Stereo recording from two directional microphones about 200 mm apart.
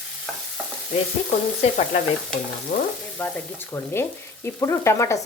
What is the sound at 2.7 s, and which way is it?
Speech, 35° left (ahead or behind).